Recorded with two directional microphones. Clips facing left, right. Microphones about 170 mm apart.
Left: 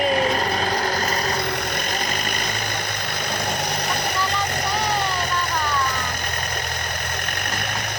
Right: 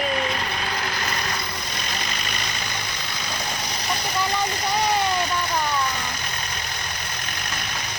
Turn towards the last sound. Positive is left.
turn(degrees=55)  # may be behind; listen again after turning